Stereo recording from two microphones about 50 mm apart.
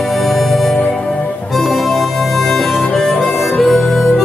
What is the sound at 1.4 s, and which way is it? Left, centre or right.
Harmonica, centre.